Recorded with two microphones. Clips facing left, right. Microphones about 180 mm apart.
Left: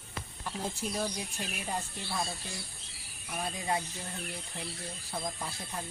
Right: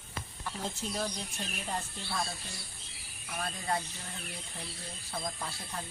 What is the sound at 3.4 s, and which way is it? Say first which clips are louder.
Speech: left 1 dB; 15° left (ahead or behind).